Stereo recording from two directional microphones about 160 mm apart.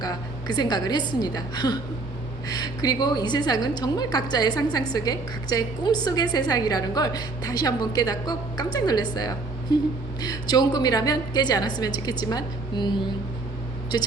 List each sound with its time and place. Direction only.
0.0 s a woman's voice: 25° left (ahead or behind)
13.9 s a woman's voice: 25° left (ahead or behind)